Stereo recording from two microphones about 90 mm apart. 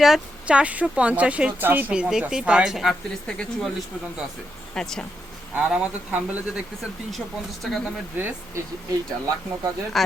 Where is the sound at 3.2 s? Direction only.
10° left (ahead or behind).